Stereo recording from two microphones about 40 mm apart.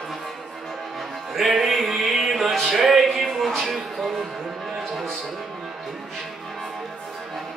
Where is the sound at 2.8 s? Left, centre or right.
Centre.